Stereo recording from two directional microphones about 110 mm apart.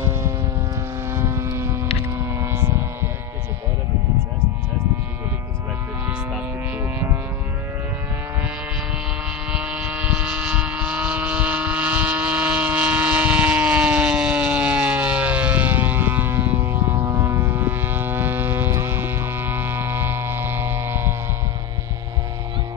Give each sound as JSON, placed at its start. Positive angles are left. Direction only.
{"t": 0.0, "sound": "vehicle", "side_deg": -25}
{"t": 9.5, "sound": "a sound", "side_deg": -5}
{"t": 10.7, "sound": "vehicle", "side_deg": -10}